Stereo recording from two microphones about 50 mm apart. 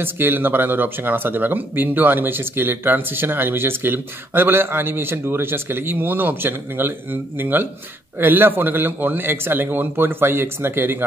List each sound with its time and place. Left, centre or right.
0.0 s speech: right